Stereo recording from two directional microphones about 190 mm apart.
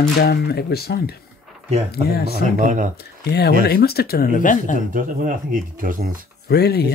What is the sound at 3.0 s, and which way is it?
Speech, 60° left (ahead or behind).